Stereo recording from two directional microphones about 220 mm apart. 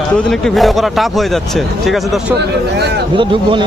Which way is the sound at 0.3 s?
Centre (ahead or behind).